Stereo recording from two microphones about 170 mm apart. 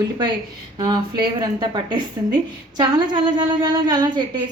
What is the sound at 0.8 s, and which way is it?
A woman's voice, 25° right (ahead or behind).